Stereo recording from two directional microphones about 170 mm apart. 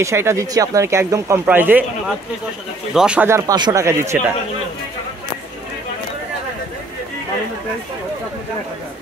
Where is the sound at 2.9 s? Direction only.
5° right (ahead or behind).